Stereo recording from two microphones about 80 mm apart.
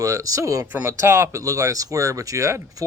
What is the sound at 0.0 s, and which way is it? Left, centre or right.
Speech, right.